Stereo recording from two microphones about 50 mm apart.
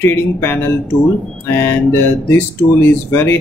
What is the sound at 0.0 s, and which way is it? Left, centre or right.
Speech, left.